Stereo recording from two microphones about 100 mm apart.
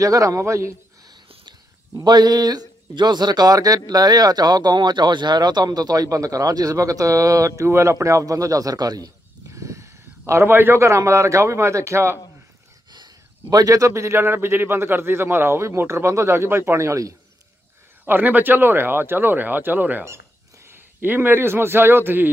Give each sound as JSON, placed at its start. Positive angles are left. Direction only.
{"t": 0.0, "sound": "speech", "side_deg": -35}
{"t": 2.0, "sound": "speech", "side_deg": -40}
{"t": 12.9, "sound": "a man's voice", "side_deg": -40}
{"t": 18.0, "sound": "a man's voice", "side_deg": -20}